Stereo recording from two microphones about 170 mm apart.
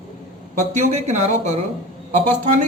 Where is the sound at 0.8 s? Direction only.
45° right (ahead or behind).